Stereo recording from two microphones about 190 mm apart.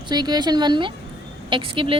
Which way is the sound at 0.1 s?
20° right (ahead or behind).